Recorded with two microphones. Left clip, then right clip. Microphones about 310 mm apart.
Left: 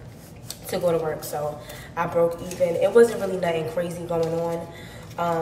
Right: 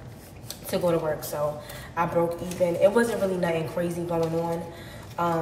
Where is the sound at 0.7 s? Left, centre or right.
Centre.